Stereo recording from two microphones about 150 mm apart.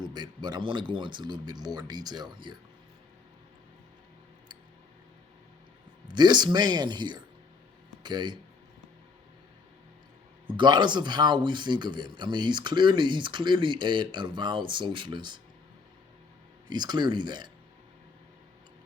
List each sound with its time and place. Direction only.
0.0 s speech: 30° right (ahead or behind)
6.1 s speech: 30° right (ahead or behind)
10.5 s speech: 30° right (ahead or behind)
16.6 s speech: 30° right (ahead or behind)